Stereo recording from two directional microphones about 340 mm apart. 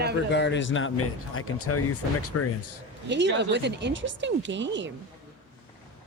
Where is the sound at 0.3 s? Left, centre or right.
Left.